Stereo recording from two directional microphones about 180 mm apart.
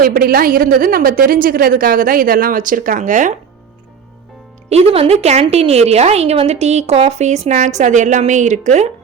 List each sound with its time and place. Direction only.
0.0 s a woman's voice: 55° right (ahead or behind)
4.7 s a woman's voice: 35° right (ahead or behind)